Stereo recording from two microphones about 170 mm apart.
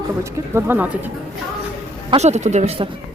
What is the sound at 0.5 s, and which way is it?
Speech, 10° right (ahead or behind).